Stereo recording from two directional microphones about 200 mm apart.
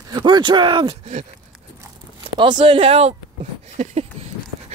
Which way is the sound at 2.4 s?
25° right (ahead or behind).